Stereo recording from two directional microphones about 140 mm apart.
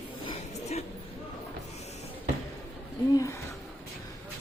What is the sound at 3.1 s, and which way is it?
Speech, 25° left (ahead or behind).